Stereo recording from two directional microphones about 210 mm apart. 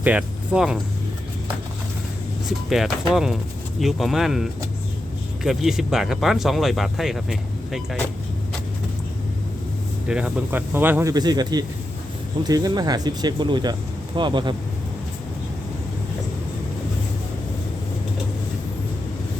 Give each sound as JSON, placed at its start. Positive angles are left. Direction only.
{"t": 0.0, "sound": "speech", "side_deg": -5}
{"t": 2.6, "sound": "speech", "side_deg": 0}
{"t": 10.1, "sound": "speech", "side_deg": -5}